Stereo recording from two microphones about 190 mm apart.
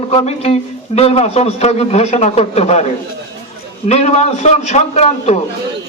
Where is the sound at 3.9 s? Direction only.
35° left (ahead or behind).